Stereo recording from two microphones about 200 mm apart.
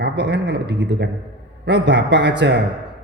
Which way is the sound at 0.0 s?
60° right (ahead or behind).